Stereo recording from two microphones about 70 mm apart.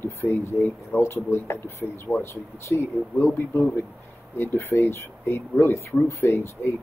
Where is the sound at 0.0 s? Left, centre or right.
Left.